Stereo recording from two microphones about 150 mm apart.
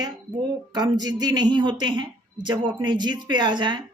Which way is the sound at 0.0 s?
30° right (ahead or behind).